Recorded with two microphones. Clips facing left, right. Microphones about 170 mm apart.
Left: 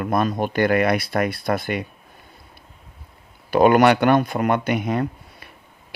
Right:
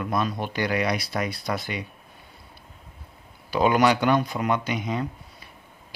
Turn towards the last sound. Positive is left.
turn(degrees=60)  # may be behind; listen again after turning